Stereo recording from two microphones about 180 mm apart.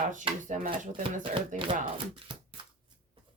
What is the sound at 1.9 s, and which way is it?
Chopping, 30° right (ahead or behind).